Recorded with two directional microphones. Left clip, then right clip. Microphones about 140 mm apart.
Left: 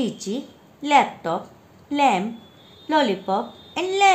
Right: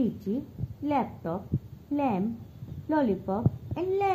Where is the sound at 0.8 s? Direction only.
20° right (ahead or behind).